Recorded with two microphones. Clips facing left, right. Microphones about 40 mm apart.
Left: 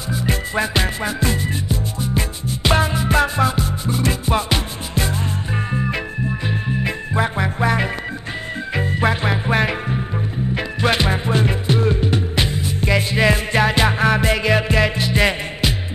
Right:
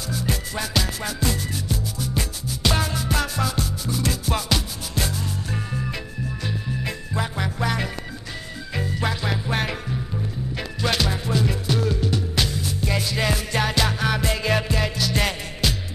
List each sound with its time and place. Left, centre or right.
0.1 s music: left